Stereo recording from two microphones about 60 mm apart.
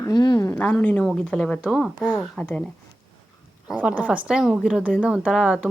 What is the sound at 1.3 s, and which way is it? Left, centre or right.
Speech, centre.